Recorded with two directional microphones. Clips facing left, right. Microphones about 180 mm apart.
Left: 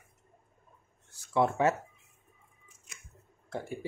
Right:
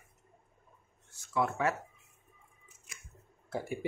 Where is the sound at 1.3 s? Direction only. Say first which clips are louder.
Left 5 dB; 25° left (ahead or behind).